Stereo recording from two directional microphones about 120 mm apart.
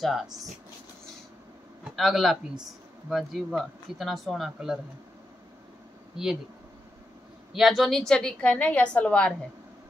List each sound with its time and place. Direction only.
0.0 s speech: centre (ahead or behind)
2.0 s speech: centre (ahead or behind)
7.5 s a woman's voice: centre (ahead or behind)